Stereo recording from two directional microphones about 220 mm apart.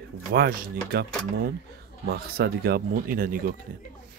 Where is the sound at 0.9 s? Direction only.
45° right (ahead or behind).